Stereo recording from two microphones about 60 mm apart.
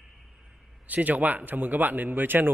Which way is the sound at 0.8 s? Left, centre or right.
Right.